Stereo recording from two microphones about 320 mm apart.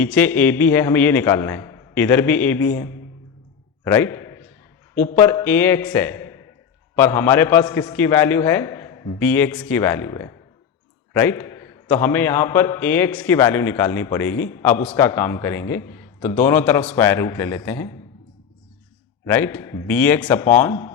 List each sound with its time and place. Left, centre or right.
0.0 s a man's voice: centre
3.8 s a sound: centre
5.1 s a man's voice: centre
19.2 s a man's voice: centre